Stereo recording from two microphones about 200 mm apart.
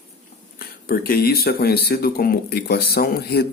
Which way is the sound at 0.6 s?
45° left (ahead or behind).